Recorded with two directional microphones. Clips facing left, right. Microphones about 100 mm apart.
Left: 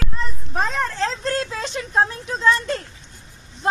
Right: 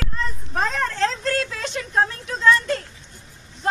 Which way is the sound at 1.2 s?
25° left (ahead or behind).